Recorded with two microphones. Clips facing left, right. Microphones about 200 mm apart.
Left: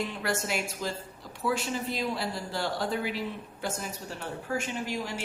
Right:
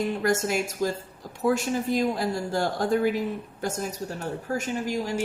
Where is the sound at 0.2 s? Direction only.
45° right (ahead or behind).